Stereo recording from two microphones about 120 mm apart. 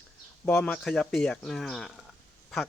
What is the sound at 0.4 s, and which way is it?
Speech, 10° left (ahead or behind).